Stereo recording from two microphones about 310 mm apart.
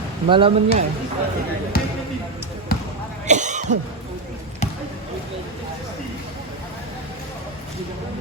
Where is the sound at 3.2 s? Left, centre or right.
Right.